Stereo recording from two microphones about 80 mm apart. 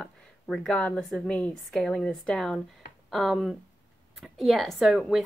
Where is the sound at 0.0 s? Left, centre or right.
Centre.